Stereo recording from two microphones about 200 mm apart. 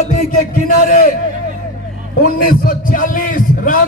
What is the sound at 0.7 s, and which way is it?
Speech, 40° left (ahead or behind).